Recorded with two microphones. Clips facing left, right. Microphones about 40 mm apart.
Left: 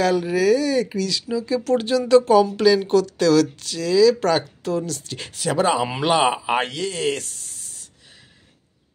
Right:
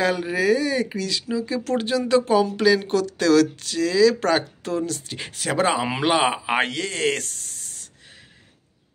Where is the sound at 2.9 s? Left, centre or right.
Right.